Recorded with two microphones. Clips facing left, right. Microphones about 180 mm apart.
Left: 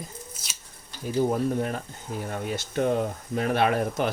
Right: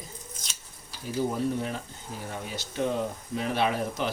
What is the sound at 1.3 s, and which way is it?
Speech, 50° left (ahead or behind).